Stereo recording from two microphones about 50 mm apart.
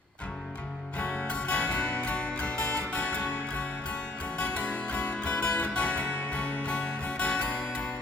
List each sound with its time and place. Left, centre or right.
0.9 s music: left